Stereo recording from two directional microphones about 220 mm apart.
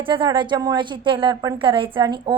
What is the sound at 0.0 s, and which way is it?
A woman's voice, 20° right (ahead or behind).